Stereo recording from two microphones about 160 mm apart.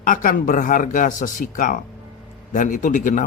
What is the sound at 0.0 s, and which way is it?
A man's voice, 55° left (ahead or behind).